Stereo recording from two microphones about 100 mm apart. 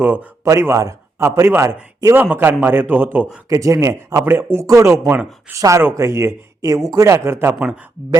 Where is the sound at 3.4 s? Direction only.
35° right (ahead or behind).